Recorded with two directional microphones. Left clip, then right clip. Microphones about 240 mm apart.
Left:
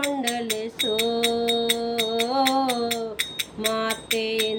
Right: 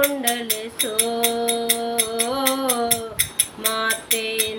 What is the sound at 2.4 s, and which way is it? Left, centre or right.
Music, left.